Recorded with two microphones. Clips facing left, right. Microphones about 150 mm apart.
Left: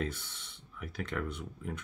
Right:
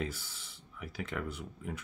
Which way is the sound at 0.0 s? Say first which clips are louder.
Left 1 dB; 5° right (ahead or behind).